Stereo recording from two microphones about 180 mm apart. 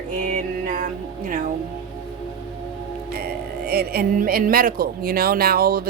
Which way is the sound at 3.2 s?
60° right (ahead or behind).